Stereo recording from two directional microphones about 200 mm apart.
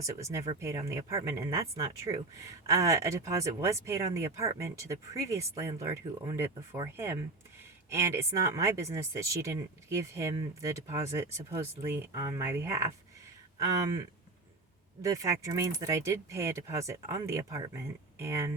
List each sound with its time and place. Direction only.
0.0 s speech: 15° right (ahead or behind)
15.0 s speech: 15° right (ahead or behind)